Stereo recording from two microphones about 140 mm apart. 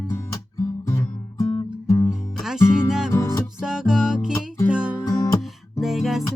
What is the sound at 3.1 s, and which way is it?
Music, 20° left (ahead or behind).